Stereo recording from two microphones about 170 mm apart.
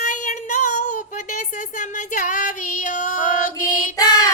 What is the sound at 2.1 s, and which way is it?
Female singing, 50° left (ahead or behind).